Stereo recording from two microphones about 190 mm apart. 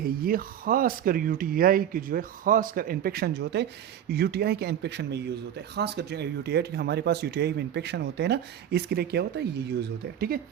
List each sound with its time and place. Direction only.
0.0 s speech: 50° right (ahead or behind)